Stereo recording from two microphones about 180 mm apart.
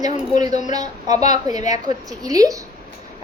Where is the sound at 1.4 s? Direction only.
20° right (ahead or behind).